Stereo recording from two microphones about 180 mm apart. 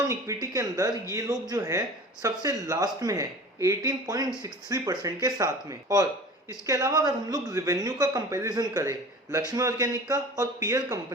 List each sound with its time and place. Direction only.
0.5 s speech: 20° right (ahead or behind)